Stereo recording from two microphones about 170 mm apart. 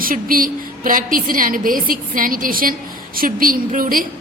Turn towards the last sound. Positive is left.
turn(degrees=-55)  # may be behind; listen again after turning